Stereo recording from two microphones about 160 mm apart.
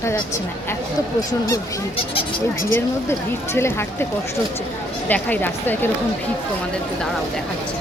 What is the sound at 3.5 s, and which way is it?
Speech, 15° left (ahead or behind).